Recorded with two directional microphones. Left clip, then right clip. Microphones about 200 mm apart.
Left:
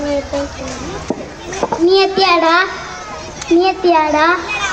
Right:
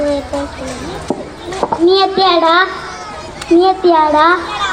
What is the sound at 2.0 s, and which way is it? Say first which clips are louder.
Child singing: right 1 dB; 30° left (ahead or behind).